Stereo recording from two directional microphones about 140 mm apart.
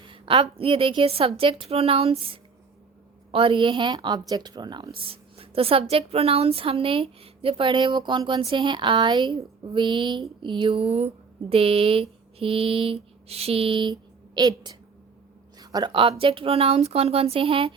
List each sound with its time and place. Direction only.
0.0 s a woman's voice: 40° right (ahead or behind)
4.9 s a woman's voice: 40° right (ahead or behind)